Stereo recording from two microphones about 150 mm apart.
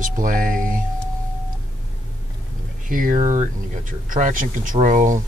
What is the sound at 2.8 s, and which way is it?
Speech, 65° right (ahead or behind).